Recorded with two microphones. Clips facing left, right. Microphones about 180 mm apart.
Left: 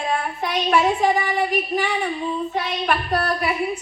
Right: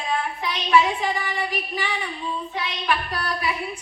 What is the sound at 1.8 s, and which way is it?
Female singing, 60° left (ahead or behind).